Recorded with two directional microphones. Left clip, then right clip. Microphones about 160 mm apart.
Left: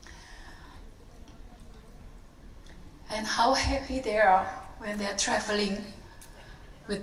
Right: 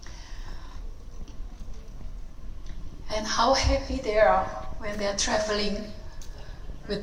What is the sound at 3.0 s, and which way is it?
A child's voice, 40° right (ahead or behind).